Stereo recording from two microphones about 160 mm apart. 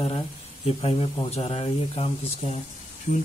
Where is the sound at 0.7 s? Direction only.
40° left (ahead or behind).